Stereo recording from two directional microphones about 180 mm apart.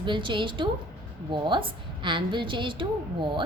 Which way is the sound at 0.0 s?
25° right (ahead or behind).